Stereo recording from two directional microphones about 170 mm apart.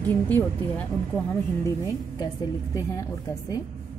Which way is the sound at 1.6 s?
20° left (ahead or behind).